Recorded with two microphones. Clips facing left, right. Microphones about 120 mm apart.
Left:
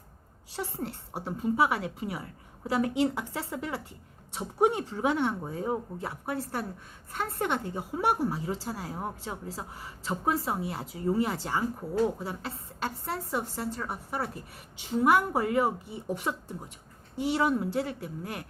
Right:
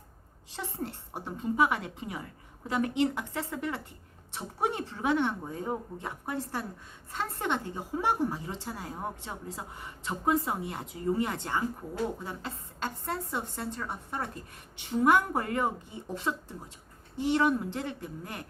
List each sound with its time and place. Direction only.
0.5 s a woman's voice: 10° left (ahead or behind)
11.8 s speech: 35° left (ahead or behind)
12.8 s a woman's voice: 10° left (ahead or behind)